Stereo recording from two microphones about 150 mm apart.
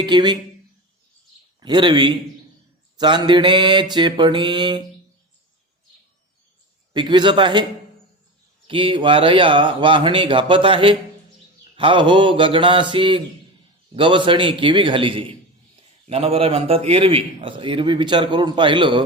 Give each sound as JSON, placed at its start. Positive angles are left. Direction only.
{"t": 0.0, "sound": "speech", "side_deg": -30}
{"t": 1.6, "sound": "a man's voice", "side_deg": -30}
{"t": 6.9, "sound": "a man's voice", "side_deg": -30}
{"t": 8.6, "sound": "a man's voice", "side_deg": -35}